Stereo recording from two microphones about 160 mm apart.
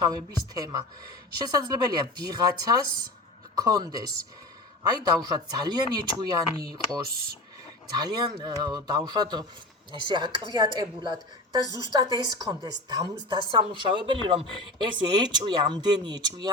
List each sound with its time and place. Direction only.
0.0 s a woman's voice: 25° right (ahead or behind)
7.9 s a woman's voice: 25° right (ahead or behind)